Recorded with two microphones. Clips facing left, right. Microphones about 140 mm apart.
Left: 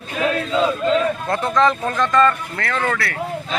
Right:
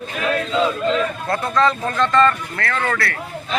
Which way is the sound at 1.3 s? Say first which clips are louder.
Even; 20° left (ahead or behind).